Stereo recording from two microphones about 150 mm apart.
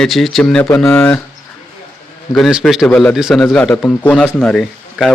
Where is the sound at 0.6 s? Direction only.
15° left (ahead or behind).